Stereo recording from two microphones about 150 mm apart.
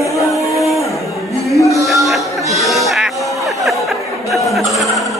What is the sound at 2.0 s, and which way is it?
Music, centre (ahead or behind).